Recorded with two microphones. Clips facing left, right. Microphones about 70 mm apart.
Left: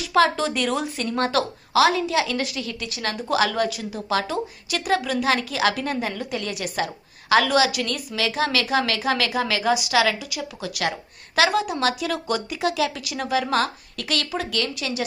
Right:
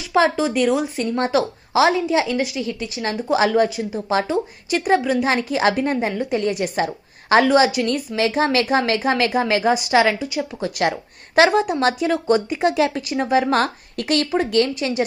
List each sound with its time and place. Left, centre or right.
0.1 s a woman's voice: centre